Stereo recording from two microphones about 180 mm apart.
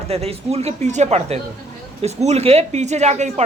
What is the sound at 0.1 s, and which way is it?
Speech, 35° right (ahead or behind).